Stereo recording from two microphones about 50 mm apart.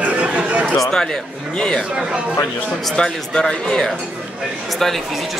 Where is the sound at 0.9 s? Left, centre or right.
Centre.